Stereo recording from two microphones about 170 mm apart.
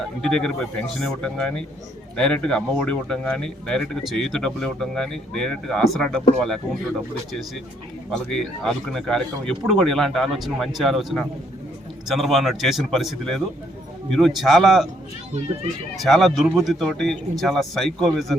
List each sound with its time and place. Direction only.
0.2 s speech: 5° left (ahead or behind)
8.1 s speech: 5° left (ahead or behind)
16.0 s speech: centre (ahead or behind)